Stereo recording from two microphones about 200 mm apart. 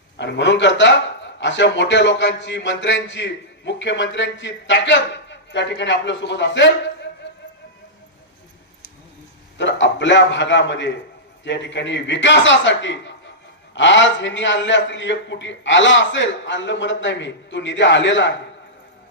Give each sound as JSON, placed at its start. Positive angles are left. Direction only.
{"t": 0.2, "sound": "a man's voice", "side_deg": 60}
{"t": 9.6, "sound": "a man's voice", "side_deg": 65}